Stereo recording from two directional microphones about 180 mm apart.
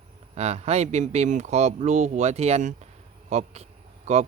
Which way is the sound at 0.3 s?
35° right (ahead or behind).